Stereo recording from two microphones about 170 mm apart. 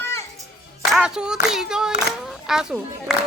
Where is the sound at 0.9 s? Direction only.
5° right (ahead or behind).